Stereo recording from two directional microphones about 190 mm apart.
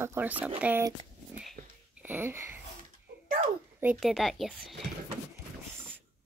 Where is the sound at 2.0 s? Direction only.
10° right (ahead or behind).